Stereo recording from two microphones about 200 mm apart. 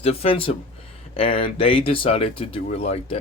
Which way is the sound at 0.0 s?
30° left (ahead or behind).